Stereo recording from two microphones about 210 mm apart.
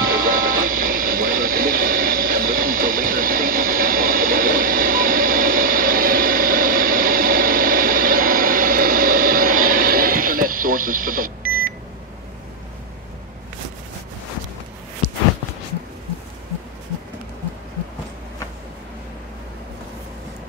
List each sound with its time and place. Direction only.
0.0 s music: 45° right (ahead or behind)